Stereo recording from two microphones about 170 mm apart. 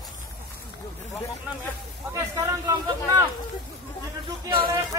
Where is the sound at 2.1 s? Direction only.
15° right (ahead or behind).